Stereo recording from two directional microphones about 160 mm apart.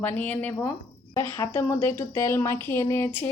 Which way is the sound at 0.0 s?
10° left (ahead or behind).